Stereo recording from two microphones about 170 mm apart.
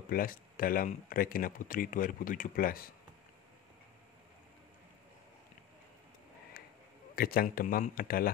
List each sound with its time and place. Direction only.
0.1 s speech: 55° left (ahead or behind)
7.2 s speech: 60° left (ahead or behind)